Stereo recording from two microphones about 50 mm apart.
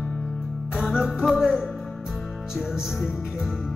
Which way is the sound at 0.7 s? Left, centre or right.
Centre.